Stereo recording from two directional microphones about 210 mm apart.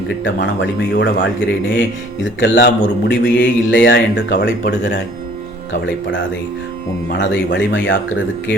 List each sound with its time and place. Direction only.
0.3 s a man's voice: 65° left (ahead or behind)